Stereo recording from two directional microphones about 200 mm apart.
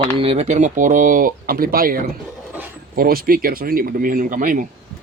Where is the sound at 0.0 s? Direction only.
25° right (ahead or behind).